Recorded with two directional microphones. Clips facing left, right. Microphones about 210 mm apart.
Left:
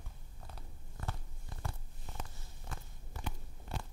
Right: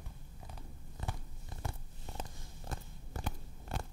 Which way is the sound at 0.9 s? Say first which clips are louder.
Even; 20° right (ahead or behind).